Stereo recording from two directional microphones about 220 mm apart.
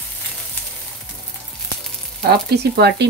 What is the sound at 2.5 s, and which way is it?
Speech, 50° right (ahead or behind).